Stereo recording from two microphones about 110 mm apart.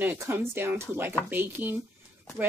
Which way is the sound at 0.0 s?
20° right (ahead or behind).